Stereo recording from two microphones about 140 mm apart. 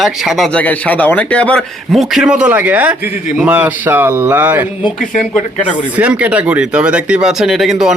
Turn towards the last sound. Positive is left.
turn(degrees=0)  # may be behind; listen again after turning